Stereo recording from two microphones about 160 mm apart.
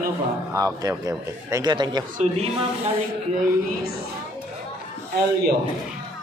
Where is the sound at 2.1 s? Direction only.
40° right (ahead or behind).